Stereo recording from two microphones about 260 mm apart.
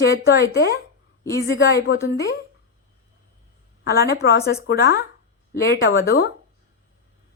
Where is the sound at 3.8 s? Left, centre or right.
Left.